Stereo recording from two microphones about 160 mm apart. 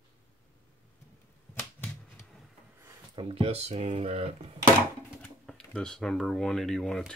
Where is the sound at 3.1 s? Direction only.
35° right (ahead or behind).